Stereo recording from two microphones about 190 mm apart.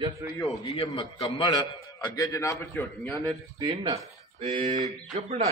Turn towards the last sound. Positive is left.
turn(degrees=-35)  # may be behind; listen again after turning